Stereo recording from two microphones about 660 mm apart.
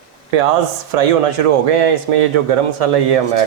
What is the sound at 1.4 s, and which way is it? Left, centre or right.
Speech, right.